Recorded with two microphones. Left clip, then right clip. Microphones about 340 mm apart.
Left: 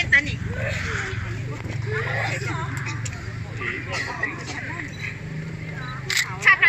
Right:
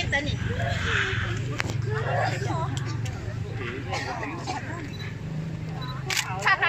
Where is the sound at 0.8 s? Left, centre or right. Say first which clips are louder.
Right 2 dB; centre.